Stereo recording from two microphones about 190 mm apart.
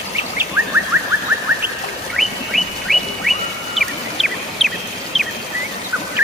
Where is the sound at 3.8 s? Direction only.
Centre (ahead or behind).